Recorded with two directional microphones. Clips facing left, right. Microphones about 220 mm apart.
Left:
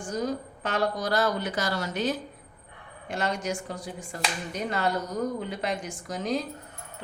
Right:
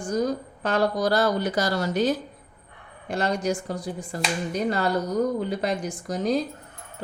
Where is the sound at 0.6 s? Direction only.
35° right (ahead or behind).